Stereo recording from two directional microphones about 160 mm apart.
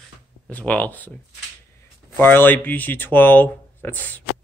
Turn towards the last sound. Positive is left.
turn(degrees=10)  # may be behind; listen again after turning